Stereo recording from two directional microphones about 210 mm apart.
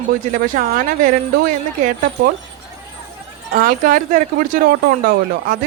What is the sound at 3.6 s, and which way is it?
A woman's voice, 40° right (ahead or behind).